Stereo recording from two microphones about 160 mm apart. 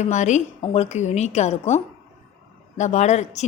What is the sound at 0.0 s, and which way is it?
A woman's voice, 50° left (ahead or behind).